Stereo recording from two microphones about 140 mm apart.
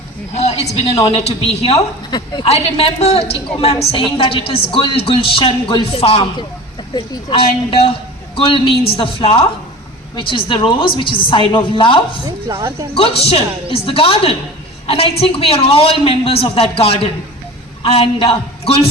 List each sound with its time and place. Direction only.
0.3 s a man's voice: 50° left (ahead or behind)
2.0 s a woman's voice: 30° left (ahead or behind)
2.5 s a woman's voice: 45° left (ahead or behind)
12.2 s speech: 30° right (ahead or behind)
12.9 s a man's voice: 45° left (ahead or behind)